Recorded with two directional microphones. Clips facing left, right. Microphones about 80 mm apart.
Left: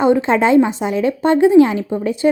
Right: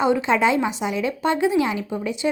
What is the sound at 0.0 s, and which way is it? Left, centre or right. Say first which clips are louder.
A woman's voice: left 5 dB; left.